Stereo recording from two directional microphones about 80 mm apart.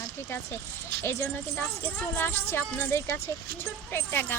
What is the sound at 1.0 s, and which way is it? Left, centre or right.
Speech, left.